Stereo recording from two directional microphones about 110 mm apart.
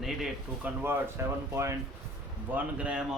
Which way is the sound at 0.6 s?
20° right (ahead or behind).